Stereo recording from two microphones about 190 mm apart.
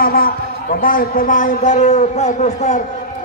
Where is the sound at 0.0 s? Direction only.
50° left (ahead or behind).